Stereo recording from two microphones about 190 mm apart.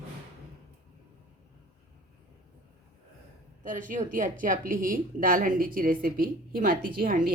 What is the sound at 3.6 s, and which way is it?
Speech, 45° right (ahead or behind).